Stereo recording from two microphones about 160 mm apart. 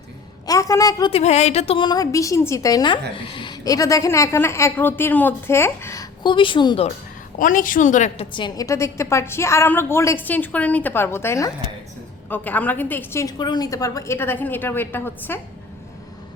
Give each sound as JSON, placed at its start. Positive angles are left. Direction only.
{"t": 0.4, "sound": "a woman's voice", "side_deg": 20}
{"t": 1.1, "sound": "a woman's voice", "side_deg": 45}
{"t": 7.3, "sound": "a woman's voice", "side_deg": 55}
{"t": 8.3, "sound": "a woman's voice", "side_deg": 30}